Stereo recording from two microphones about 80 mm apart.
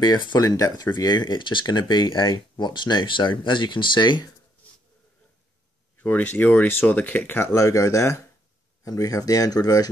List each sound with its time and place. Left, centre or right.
0.0 s speech: left
5.9 s speech: left
7.5 s speech: left